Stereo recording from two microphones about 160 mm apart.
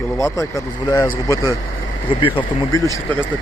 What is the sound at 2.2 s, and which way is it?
Speech, 30° left (ahead or behind).